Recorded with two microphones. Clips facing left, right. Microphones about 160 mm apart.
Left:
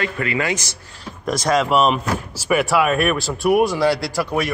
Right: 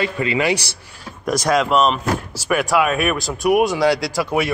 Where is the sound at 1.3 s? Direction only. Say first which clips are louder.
Right 1 dB; centre (ahead or behind).